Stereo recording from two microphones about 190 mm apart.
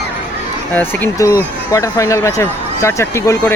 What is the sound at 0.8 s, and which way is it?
Speech, 10° left (ahead or behind).